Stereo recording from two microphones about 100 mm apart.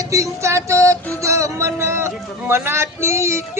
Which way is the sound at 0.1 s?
30° right (ahead or behind).